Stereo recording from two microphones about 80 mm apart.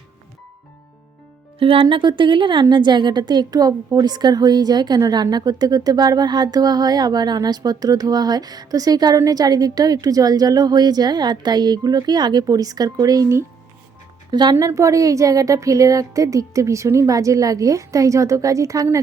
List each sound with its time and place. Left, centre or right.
1.9 s a woman's voice: right
14.3 s speech: right
14.6 s a woman's voice: right